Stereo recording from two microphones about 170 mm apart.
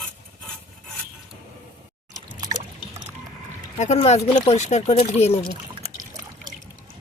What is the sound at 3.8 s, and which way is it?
Speech, 40° left (ahead or behind).